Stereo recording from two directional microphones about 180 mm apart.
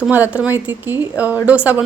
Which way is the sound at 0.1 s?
10° right (ahead or behind).